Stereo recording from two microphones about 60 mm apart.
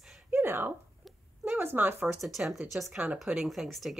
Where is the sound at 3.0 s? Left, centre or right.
Right.